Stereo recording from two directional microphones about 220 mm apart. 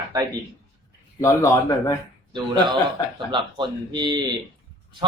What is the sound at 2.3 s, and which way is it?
Speech, 20° right (ahead or behind).